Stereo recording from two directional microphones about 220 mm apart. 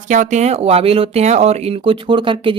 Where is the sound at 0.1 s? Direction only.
35° right (ahead or behind).